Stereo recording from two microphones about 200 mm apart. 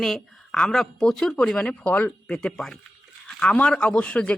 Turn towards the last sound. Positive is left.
turn(degrees=5)  # may be behind; listen again after turning